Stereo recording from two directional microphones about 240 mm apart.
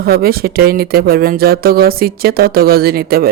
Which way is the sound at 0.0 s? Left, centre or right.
Right.